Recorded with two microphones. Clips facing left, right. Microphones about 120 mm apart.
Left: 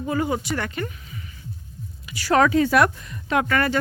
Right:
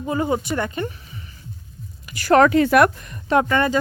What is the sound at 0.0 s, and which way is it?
Speech, 25° right (ahead or behind).